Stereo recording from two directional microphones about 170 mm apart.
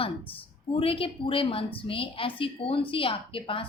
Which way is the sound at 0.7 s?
35° left (ahead or behind).